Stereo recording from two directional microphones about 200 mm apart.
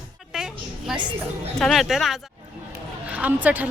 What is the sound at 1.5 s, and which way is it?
Speech, centre (ahead or behind).